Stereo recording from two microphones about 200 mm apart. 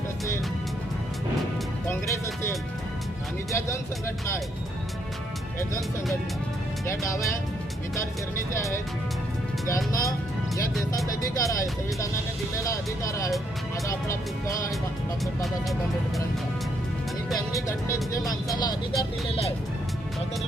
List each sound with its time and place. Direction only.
1.9 s speech: 15° left (ahead or behind)
6.8 s speech: 15° left (ahead or behind)
9.6 s speech: 15° left (ahead or behind)
17.5 s speech: 15° left (ahead or behind)